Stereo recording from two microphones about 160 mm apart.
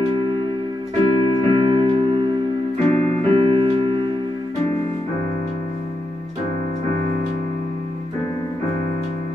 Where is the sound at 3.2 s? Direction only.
35° right (ahead or behind).